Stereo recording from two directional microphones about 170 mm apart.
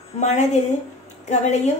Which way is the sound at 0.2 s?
45° left (ahead or behind).